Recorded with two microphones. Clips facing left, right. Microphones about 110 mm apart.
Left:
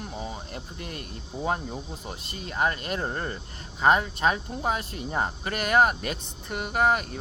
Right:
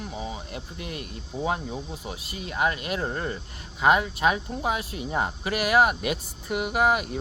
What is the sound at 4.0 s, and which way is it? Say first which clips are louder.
Speech: right 1 dB; 5° right (ahead or behind).